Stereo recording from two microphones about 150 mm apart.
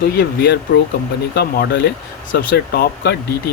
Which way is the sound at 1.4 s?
90° left.